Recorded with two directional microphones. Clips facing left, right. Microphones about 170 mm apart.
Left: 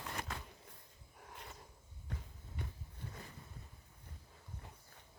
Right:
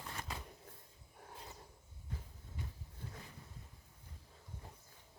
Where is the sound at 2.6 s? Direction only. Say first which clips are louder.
Left 2 dB; 65° left (ahead or behind).